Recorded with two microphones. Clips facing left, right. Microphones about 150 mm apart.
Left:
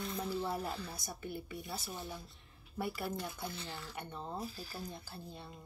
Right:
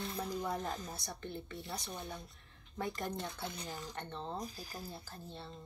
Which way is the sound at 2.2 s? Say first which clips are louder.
Even; 5° left (ahead or behind).